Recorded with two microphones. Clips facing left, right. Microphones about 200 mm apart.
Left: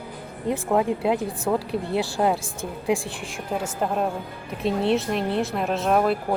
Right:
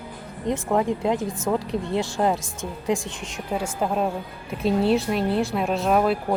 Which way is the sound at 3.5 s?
Centre (ahead or behind).